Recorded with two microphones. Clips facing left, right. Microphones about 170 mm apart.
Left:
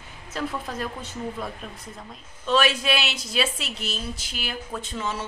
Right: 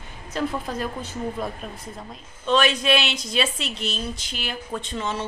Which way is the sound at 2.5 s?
5° left (ahead or behind).